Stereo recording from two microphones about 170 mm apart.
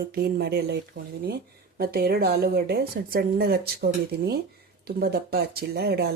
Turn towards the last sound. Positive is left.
turn(degrees=-70)  # may be behind; listen again after turning